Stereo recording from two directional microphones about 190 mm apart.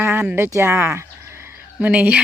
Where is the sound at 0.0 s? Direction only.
10° right (ahead or behind).